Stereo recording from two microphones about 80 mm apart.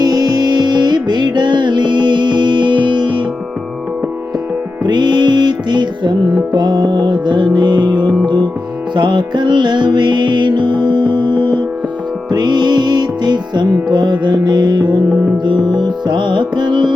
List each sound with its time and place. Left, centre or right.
0.0 s music: right
4.9 s music: right
12.3 s music: right